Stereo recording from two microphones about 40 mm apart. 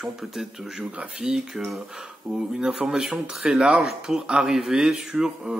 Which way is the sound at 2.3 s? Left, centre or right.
Right.